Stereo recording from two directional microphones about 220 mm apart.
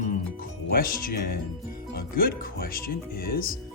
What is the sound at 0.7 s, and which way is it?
Speech, 40° left (ahead or behind).